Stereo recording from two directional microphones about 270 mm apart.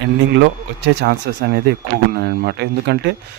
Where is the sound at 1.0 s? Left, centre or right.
Right.